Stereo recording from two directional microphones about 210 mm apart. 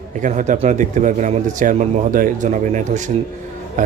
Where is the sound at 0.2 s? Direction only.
35° right (ahead or behind).